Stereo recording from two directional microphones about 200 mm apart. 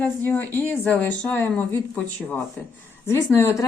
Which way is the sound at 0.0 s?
10° left (ahead or behind).